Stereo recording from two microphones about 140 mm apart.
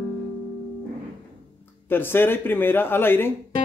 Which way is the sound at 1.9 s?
15° left (ahead or behind).